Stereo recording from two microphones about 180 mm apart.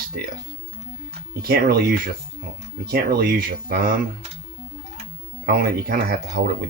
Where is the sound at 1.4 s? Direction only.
55° right (ahead or behind).